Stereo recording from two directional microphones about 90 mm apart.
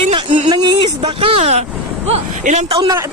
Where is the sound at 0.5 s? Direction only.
50° right (ahead or behind).